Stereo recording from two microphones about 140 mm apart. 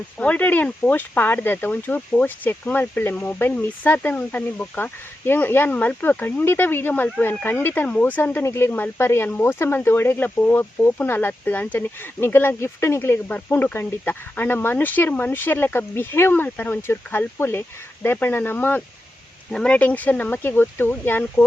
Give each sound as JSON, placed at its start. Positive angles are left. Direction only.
{"t": 0.2, "sound": "speech", "side_deg": 10}